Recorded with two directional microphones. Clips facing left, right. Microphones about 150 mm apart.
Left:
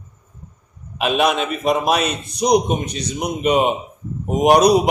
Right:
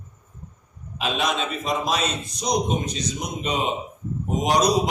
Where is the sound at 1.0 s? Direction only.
65° left (ahead or behind).